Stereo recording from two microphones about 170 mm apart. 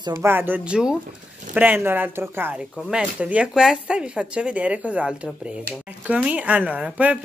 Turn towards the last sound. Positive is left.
turn(degrees=-10)  # may be behind; listen again after turning